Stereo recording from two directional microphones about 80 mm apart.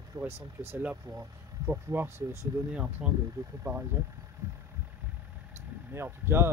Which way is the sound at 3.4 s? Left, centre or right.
Right.